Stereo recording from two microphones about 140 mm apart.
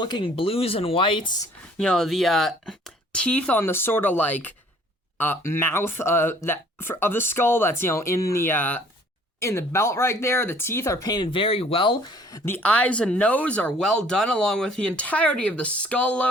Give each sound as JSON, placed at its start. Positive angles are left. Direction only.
{"t": 0.0, "sound": "speech", "side_deg": 35}
{"t": 1.8, "sound": "speech", "side_deg": 5}
{"t": 12.3, "sound": "speech", "side_deg": 10}